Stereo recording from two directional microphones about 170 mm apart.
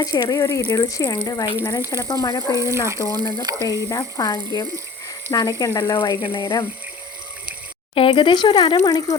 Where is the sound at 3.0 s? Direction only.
20° left (ahead or behind).